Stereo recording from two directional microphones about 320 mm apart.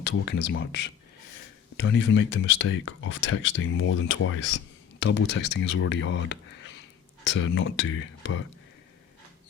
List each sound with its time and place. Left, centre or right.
0.0 s speech: left